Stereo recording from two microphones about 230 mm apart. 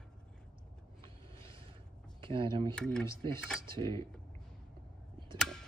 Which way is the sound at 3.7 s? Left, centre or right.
Right.